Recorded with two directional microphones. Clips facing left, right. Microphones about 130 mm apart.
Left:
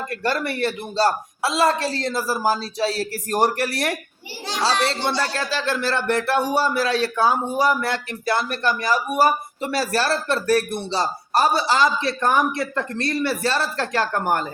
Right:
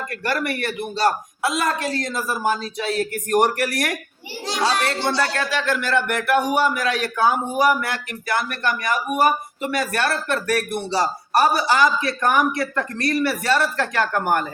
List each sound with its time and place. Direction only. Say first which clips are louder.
0.3 s a woman's voice: left 1 dB; 25° left (ahead or behind)
5.3 s a woman's voice: right 1 dB; 30° left (ahead or behind)